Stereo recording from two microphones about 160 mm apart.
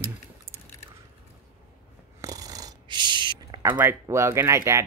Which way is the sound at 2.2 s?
20° right (ahead or behind).